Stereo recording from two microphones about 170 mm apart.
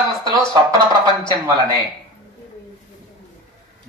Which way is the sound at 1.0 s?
25° left (ahead or behind).